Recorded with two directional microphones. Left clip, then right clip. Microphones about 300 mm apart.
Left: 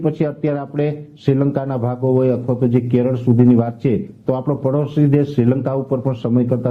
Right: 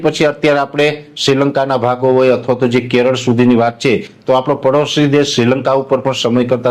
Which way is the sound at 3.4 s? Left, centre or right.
Right.